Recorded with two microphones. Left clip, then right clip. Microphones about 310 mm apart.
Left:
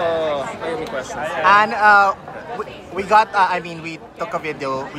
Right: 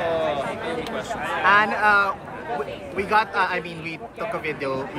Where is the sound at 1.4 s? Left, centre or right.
Centre.